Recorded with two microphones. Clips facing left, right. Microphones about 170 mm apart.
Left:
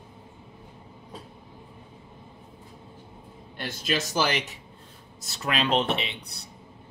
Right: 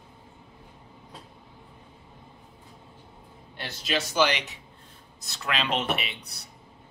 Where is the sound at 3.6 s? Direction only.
50° left (ahead or behind).